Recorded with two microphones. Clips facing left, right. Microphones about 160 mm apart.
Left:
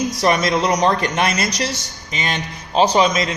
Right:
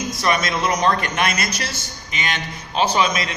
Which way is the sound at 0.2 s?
35° left (ahead or behind).